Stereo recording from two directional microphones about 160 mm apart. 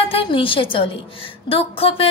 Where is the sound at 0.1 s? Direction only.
35° left (ahead or behind).